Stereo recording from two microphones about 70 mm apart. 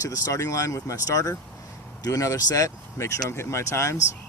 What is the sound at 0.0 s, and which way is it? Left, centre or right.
Speech, left.